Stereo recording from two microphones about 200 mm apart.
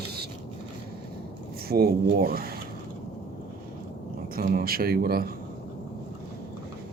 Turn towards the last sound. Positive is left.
turn(degrees=-50)  # may be behind; listen again after turning